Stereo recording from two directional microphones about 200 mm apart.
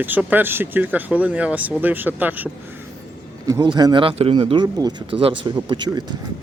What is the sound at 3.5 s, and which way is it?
Speech, 20° right (ahead or behind).